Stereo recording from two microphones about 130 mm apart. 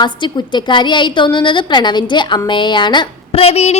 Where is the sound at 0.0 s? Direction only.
35° left (ahead or behind).